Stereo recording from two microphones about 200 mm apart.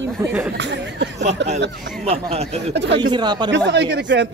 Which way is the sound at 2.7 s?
60° right (ahead or behind).